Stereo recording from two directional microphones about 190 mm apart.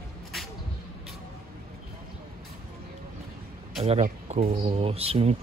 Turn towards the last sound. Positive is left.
turn(degrees=-30)  # may be behind; listen again after turning